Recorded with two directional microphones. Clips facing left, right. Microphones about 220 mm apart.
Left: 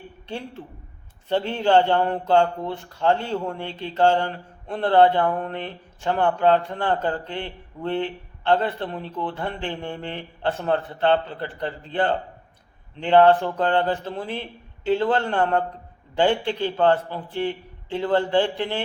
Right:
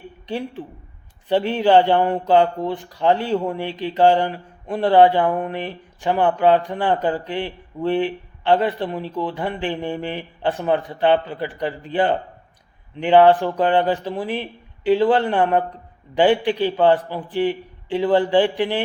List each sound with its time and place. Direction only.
0.3 s speech: 15° right (ahead or behind)